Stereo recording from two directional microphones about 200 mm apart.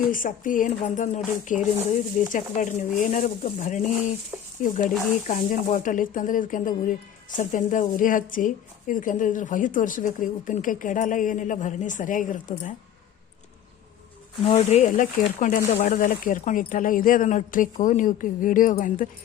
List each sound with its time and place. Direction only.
0.1 s a woman's voice: 40° left (ahead or behind)
14.4 s a woman's voice: 30° left (ahead or behind)